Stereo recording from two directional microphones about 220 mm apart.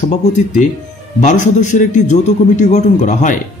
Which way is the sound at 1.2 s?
35° left (ahead or behind).